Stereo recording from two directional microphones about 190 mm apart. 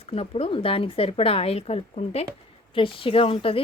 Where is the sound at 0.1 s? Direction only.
30° left (ahead or behind).